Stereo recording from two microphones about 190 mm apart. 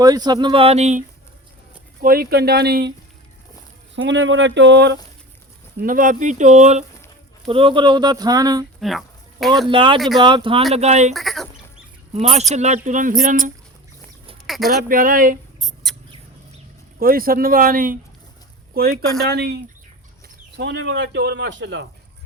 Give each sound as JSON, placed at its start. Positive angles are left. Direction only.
{"t": 0.0, "sound": "speech", "side_deg": -20}
{"t": 2.0, "sound": "speech", "side_deg": -50}
{"t": 3.9, "sound": "a man's voice", "side_deg": -75}
{"t": 5.8, "sound": "speech", "side_deg": -45}
{"t": 7.4, "sound": "speech", "side_deg": -25}
{"t": 8.8, "sound": "a sound", "side_deg": 0}
{"t": 9.6, "sound": "speech", "side_deg": -25}
{"t": 10.8, "sound": "speech", "side_deg": -35}
{"t": 11.1, "sound": "chicken", "side_deg": 0}
{"t": 12.1, "sound": "speech", "side_deg": -35}
{"t": 14.4, "sound": "a sound", "side_deg": 0}
{"t": 14.8, "sound": "speech", "side_deg": -45}
{"t": 15.6, "sound": "rodents", "side_deg": 0}
{"t": 17.0, "sound": "a man's voice", "side_deg": -50}